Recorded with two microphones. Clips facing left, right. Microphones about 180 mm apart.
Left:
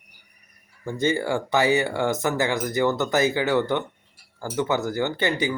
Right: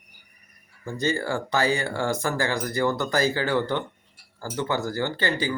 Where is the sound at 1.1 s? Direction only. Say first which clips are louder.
Left 3 dB; 20° left (ahead or behind).